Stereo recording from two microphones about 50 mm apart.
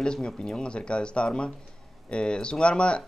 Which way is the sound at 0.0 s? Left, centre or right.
Centre.